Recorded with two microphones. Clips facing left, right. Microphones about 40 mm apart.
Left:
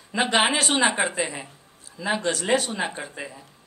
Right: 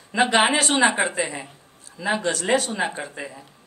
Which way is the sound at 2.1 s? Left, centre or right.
Centre.